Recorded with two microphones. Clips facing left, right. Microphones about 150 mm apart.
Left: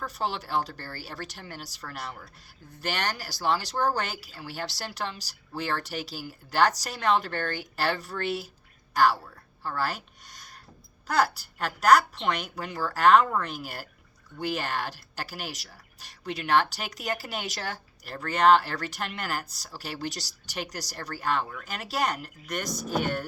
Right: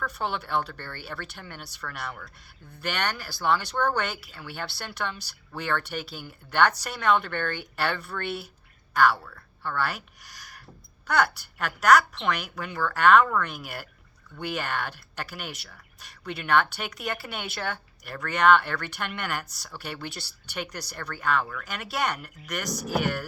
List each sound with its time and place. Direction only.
0.0 s speech: 35° left (ahead or behind)
5.8 s speech: 55° right (ahead or behind)
6.6 s speech: 35° left (ahead or behind)